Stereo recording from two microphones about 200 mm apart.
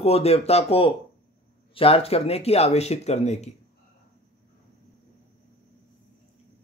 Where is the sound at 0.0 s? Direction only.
30° left (ahead or behind).